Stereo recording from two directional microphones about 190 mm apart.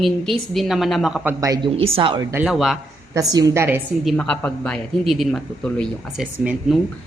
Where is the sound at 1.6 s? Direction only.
30° right (ahead or behind).